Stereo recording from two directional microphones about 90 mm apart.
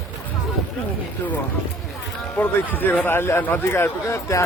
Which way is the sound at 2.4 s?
20° left (ahead or behind).